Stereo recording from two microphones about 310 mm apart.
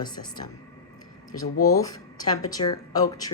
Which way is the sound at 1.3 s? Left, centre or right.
Left.